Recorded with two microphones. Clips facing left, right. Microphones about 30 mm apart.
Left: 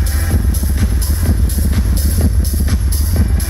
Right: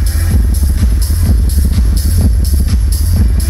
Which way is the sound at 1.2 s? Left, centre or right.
Centre.